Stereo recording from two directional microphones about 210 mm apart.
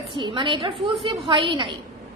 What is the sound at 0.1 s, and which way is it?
A woman's voice, 25° right (ahead or behind).